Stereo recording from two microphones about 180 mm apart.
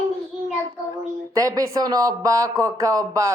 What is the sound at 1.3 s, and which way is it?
Speech, 20° right (ahead or behind).